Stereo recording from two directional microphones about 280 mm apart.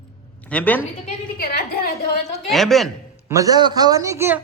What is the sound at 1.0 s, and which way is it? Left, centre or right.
A woman's voice, left.